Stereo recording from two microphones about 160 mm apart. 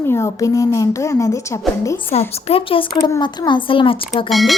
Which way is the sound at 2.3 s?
35° left (ahead or behind).